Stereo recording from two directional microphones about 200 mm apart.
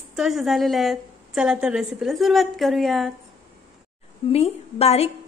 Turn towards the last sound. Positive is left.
turn(degrees=30)  # may be behind; listen again after turning